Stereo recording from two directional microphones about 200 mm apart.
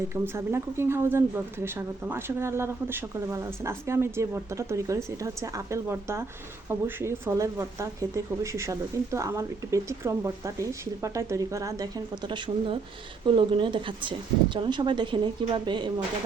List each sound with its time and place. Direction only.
0.1 s a woman's voice: 10° right (ahead or behind)